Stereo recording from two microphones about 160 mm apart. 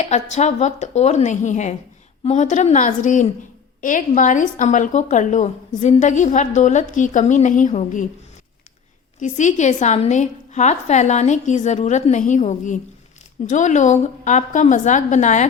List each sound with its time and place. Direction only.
0.0 s a woman's voice: 45° left (ahead or behind)
9.2 s a woman's voice: 50° left (ahead or behind)